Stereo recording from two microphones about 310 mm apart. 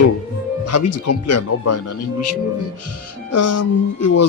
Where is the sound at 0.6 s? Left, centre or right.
Left.